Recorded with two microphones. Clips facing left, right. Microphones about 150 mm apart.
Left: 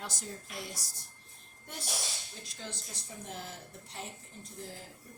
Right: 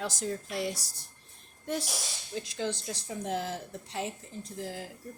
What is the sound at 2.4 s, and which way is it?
A woman's voice, 90° right.